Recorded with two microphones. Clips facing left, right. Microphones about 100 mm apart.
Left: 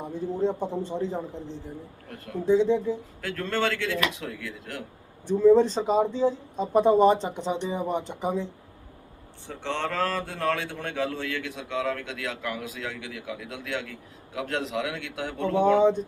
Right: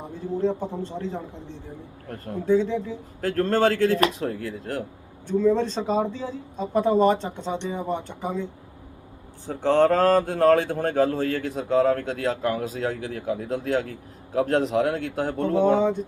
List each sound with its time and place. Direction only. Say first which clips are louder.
0.4 s speech: right 1 dB; 15° left (ahead or behind)
2.5 s speech: left 1 dB; 20° left (ahead or behind)
3.2 s speech: right 11 dB; 40° right (ahead or behind)
5.3 s speech: left 3 dB; 15° left (ahead or behind)
9.5 s speech: right 11 dB; 40° right (ahead or behind)